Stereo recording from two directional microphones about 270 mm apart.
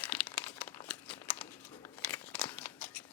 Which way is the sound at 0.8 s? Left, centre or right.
Centre.